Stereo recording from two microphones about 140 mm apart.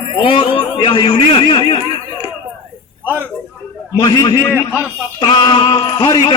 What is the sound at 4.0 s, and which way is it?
Speech, 30° left (ahead or behind).